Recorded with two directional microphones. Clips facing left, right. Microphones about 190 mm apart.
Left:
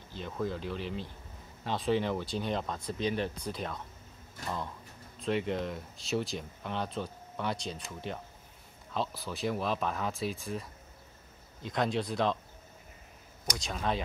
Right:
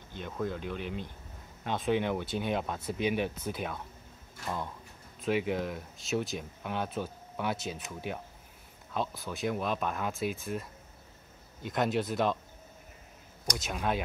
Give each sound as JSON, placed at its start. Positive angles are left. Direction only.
{"t": 0.2, "sound": "speech", "side_deg": 0}
{"t": 0.7, "sound": "speech", "side_deg": -55}
{"t": 1.6, "sound": "speech", "side_deg": 0}
{"t": 5.2, "sound": "speech", "side_deg": -5}
{"t": 13.6, "sound": "speech", "side_deg": -5}